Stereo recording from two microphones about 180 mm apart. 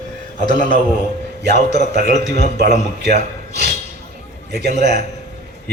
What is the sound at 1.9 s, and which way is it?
Speech, 65° right (ahead or behind).